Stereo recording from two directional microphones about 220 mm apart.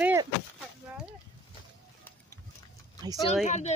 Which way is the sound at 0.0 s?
10° right (ahead or behind).